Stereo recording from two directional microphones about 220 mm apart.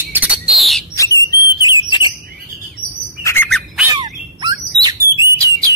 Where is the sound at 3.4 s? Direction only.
Centre (ahead or behind).